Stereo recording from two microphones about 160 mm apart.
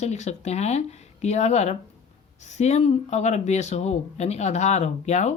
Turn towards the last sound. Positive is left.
turn(degrees=45)  # may be behind; listen again after turning